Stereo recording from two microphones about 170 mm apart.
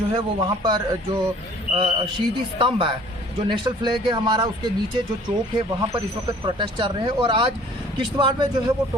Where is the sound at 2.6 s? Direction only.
30° right (ahead or behind).